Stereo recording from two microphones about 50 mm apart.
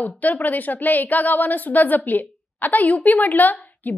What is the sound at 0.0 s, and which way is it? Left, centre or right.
A woman's voice, left.